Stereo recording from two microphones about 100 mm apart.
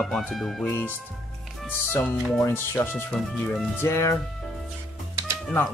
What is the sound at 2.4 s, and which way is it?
Speech, 25° left (ahead or behind).